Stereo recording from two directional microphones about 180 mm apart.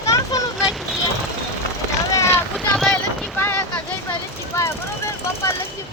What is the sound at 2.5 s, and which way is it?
Boat, centre (ahead or behind).